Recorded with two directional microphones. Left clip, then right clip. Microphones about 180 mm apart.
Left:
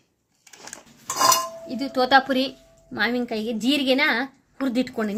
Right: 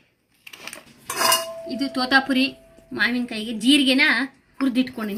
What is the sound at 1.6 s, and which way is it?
A woman's voice, 35° left (ahead or behind).